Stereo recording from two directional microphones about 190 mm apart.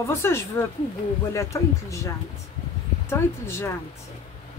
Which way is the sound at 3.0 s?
15° left (ahead or behind).